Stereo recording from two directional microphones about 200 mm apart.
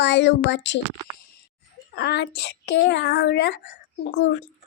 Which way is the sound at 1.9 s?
55° left (ahead or behind).